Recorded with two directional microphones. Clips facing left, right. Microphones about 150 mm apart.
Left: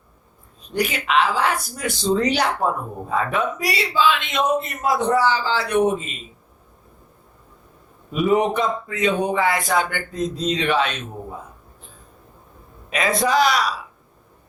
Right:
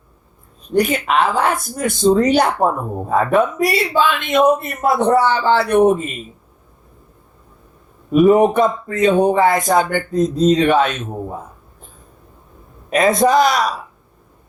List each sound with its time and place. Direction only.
0.7 s a man's voice: 50° right (ahead or behind)
8.1 s speech: 50° right (ahead or behind)
12.9 s speech: 45° right (ahead or behind)